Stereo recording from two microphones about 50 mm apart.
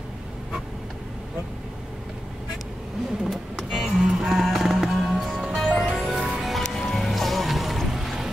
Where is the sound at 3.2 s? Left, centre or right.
Centre.